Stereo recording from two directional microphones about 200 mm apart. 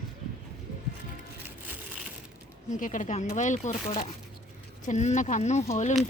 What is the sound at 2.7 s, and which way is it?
Speech, 40° left (ahead or behind).